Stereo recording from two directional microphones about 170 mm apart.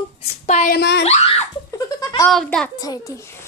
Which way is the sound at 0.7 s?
85° left.